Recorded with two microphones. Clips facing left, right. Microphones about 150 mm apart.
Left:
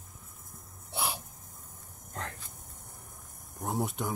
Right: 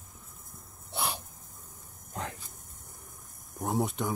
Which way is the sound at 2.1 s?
10° right (ahead or behind).